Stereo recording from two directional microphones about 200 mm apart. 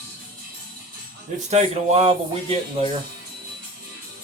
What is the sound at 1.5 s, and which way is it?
Speech, 30° right (ahead or behind).